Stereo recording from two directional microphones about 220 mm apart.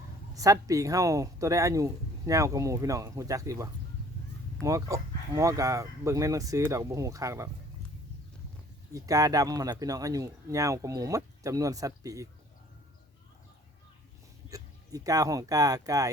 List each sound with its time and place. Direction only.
0.3 s speech: 15° right (ahead or behind)
8.9 s speech: 15° right (ahead or behind)
14.5 s speech: 15° right (ahead or behind)